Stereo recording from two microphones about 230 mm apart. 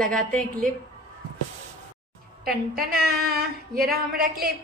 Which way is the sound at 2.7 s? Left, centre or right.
Right.